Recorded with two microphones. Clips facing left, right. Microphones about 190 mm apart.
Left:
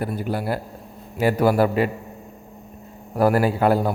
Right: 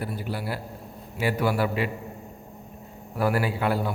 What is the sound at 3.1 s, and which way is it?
Speech, 45° left (ahead or behind).